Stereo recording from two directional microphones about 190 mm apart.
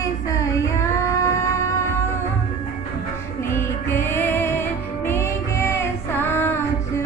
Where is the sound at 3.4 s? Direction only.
15° left (ahead or behind).